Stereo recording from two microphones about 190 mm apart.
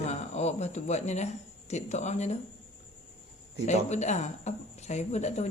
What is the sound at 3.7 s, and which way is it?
Speech, 35° left (ahead or behind).